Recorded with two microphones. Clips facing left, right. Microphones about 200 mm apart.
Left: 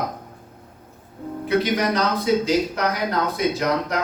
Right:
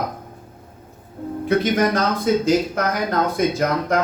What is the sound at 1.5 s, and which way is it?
Speech, 50° right (ahead or behind).